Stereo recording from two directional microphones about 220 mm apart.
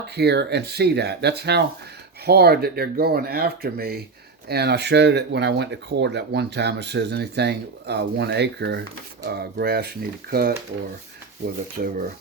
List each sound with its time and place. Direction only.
0.2 s speech: 50° right (ahead or behind)
11.8 s speech: 40° right (ahead or behind)